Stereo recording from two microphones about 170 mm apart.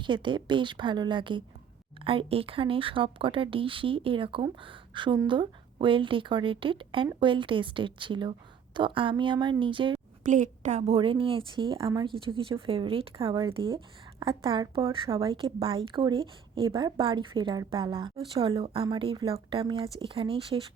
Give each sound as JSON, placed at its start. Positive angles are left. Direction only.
{"t": 0.0, "sound": "a woman's voice", "side_deg": -30}
{"t": 10.2, "sound": "a woman's voice", "side_deg": -45}